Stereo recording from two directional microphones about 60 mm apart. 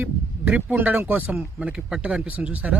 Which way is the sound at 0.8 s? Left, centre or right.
Right.